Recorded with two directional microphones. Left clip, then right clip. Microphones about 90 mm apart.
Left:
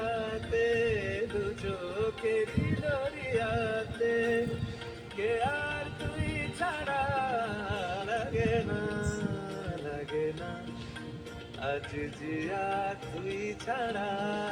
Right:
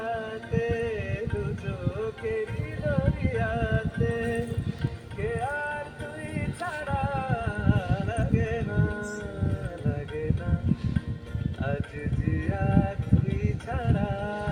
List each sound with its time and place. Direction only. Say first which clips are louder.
0.0 s music: right 1 dB; 35° right (ahead or behind)
12.4 s music: right 1 dB; 35° right (ahead or behind)